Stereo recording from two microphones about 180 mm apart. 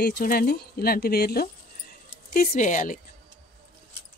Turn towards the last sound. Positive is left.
turn(degrees=45)  # may be behind; listen again after turning